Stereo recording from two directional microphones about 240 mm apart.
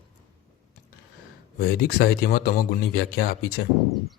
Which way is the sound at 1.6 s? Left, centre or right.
Left.